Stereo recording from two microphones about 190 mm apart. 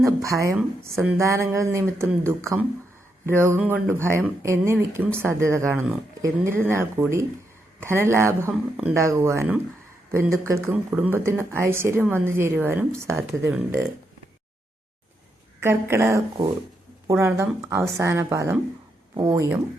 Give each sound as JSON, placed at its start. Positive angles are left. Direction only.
{"t": 0.0, "sound": "speech", "side_deg": -15}
{"t": 15.6, "sound": "speech", "side_deg": -10}